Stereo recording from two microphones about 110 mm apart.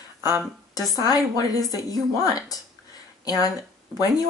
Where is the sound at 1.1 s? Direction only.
35° left (ahead or behind).